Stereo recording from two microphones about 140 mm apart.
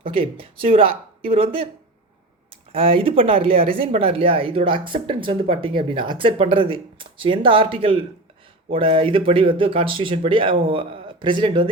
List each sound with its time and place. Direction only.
0.1 s speech: 40° right (ahead or behind)
2.7 s speech: 40° right (ahead or behind)